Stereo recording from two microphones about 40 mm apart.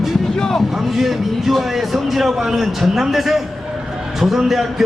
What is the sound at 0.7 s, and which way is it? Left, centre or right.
Speech, centre.